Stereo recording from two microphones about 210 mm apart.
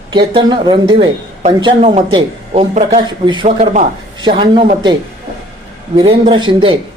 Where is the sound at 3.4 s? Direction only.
35° right (ahead or behind).